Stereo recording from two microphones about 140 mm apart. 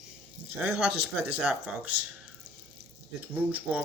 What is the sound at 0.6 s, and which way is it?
Speech, 10° right (ahead or behind).